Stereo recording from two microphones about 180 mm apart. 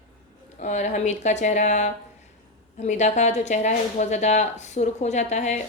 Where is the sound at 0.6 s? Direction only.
40° left (ahead or behind).